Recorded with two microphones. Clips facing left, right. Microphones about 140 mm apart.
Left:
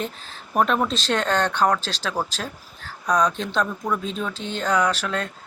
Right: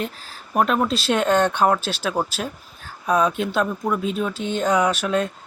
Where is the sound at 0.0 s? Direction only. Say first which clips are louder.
Right 1 dB; 5° right (ahead or behind).